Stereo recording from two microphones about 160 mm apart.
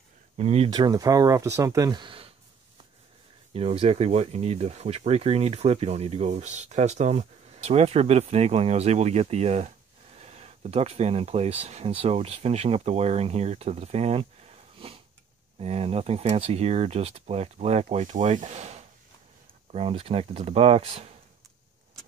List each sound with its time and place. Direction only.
0.4 s speech: 40° right (ahead or behind)
0.7 s speech: 25° right (ahead or behind)
3.5 s speech: 40° right (ahead or behind)